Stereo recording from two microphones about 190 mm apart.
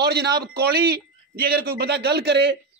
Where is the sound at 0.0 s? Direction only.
60° right (ahead or behind).